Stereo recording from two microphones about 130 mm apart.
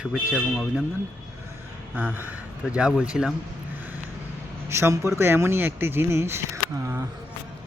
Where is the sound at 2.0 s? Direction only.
15° right (ahead or behind).